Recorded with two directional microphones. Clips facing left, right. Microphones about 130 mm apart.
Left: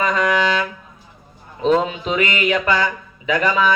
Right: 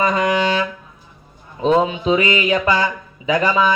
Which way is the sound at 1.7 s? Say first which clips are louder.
Right 3 dB; 20° right (ahead or behind).